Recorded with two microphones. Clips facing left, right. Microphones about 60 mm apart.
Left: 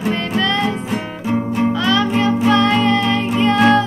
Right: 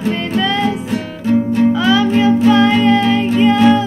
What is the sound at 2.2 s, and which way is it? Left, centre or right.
Child singing, centre.